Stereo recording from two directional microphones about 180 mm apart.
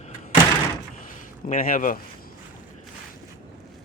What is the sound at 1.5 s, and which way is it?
Speech, 50° left (ahead or behind).